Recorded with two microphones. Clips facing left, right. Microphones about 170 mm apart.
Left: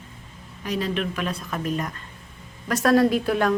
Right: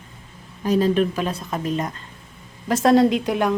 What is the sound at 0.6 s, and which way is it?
A woman's voice, 40° right (ahead or behind).